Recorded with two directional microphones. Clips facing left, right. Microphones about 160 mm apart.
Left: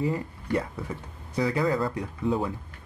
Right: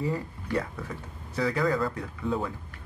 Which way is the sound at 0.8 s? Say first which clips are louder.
Left 2 dB; 15° left (ahead or behind).